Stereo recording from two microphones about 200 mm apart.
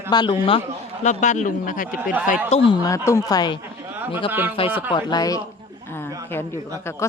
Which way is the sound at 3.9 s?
10° right (ahead or behind).